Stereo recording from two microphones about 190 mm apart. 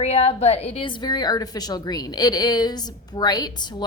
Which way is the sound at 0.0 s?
35° left (ahead or behind).